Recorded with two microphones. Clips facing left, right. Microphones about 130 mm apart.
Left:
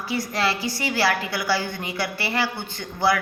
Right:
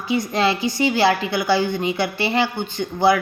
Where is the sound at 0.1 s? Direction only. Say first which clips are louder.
Right 5 dB; 20° right (ahead or behind).